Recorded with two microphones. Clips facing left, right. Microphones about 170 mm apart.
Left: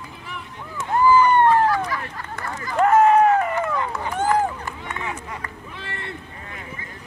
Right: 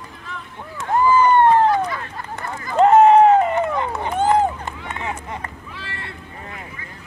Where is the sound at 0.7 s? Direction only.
20° right (ahead or behind).